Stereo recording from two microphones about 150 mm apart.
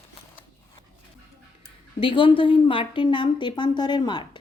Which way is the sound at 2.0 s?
35° left (ahead or behind).